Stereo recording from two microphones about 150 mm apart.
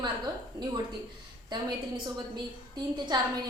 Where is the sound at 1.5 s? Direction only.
30° right (ahead or behind).